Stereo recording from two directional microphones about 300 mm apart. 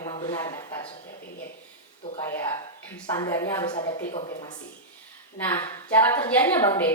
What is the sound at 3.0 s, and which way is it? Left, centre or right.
Speech, centre.